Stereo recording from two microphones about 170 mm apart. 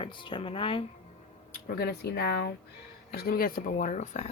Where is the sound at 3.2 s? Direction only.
60° left (ahead or behind); by 4.3 s 45° left (ahead or behind).